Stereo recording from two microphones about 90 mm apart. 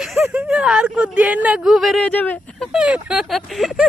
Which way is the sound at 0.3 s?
10° right (ahead or behind).